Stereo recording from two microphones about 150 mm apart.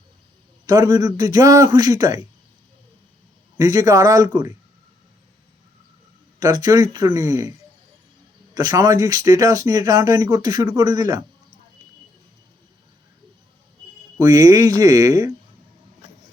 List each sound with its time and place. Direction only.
0.6 s speech: 25° right (ahead or behind)
3.6 s speech: 20° right (ahead or behind)
6.4 s speech: 20° right (ahead or behind)
8.5 s speech: 25° right (ahead or behind)
14.2 s speech: 20° right (ahead or behind)